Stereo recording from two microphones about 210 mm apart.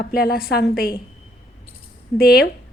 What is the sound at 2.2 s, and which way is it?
Speech, 45° left (ahead or behind).